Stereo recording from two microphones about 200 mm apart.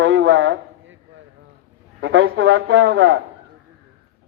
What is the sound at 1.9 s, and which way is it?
Speech, 70° right (ahead or behind).